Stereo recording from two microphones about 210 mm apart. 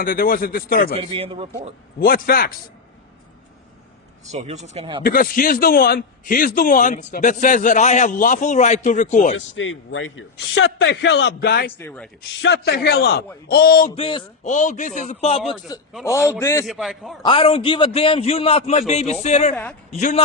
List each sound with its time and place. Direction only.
0.0 s a man's voice: 45° left (ahead or behind)
0.9 s a man's voice: 25° right (ahead or behind)
2.0 s a man's voice: 45° left (ahead or behind)
4.3 s speech: 30° right (ahead or behind)
5.0 s a man's voice: 40° left (ahead or behind)
9.6 s a man's voice: 65° left (ahead or behind); by 11.7 s 50° left (ahead or behind)
11.8 s a man's voice: 10° left (ahead or behind)
12.3 s a man's voice: 55° left (ahead or behind)
13.9 s a man's voice: 25° left (ahead or behind)
14.5 s a man's voice: 35° left (ahead or behind)
16.0 s a man's voice: 15° left (ahead or behind)
16.6 s a man's voice: centre (ahead or behind)
17.2 s a man's voice: 25° left (ahead or behind)